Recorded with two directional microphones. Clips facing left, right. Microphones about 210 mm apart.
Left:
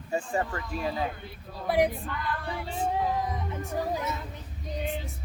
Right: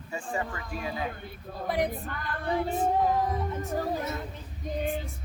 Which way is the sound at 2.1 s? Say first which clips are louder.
Left 3 dB; 50° right (ahead or behind).